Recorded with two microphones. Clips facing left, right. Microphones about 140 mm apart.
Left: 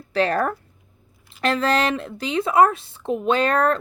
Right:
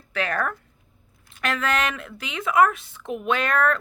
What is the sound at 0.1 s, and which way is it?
Speech, 35° left (ahead or behind).